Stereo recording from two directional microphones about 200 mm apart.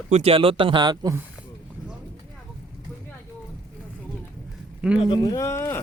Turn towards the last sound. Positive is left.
turn(degrees=15)  # may be behind; listen again after turning